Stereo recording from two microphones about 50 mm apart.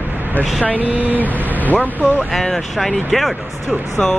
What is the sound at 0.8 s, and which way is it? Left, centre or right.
Speech, right.